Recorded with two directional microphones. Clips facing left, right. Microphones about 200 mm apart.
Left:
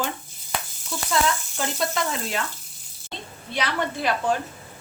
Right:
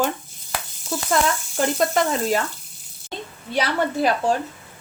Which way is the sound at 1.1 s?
50° right (ahead or behind).